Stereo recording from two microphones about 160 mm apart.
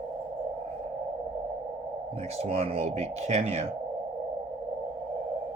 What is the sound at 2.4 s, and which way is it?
Speech, 40° right (ahead or behind).